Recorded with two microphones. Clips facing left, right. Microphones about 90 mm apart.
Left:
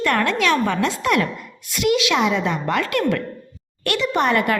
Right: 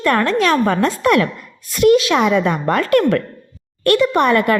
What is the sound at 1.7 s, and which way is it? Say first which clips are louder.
A woman's voice: right 7 dB; 40° right (ahead or behind).